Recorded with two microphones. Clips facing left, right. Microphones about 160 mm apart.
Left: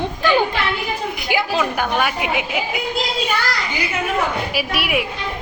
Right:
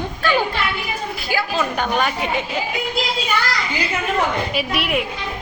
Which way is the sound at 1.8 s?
5° left (ahead or behind).